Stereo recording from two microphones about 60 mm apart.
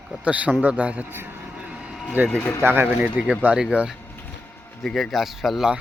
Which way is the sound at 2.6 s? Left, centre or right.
Right.